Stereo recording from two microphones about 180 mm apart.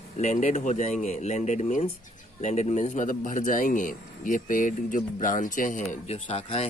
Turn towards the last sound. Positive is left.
turn(degrees=35)  # may be behind; listen again after turning